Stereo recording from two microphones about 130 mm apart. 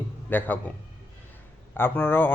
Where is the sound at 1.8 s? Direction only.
15° left (ahead or behind).